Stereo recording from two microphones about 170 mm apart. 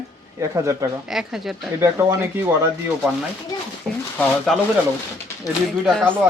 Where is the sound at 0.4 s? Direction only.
15° right (ahead or behind).